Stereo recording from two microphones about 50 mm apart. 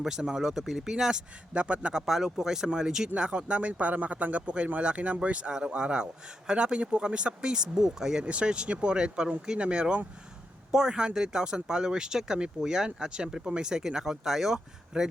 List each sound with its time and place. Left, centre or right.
0.0 s speech: centre
1.5 s speech: right
8.2 s speech: right